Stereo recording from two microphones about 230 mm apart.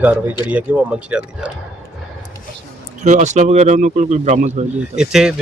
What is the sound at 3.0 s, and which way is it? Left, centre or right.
Speech, right.